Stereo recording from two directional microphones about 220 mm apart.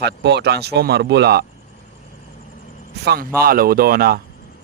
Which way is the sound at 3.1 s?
45° right (ahead or behind).